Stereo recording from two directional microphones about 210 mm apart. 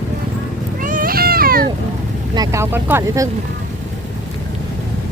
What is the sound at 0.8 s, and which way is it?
Cat, 40° right (ahead or behind).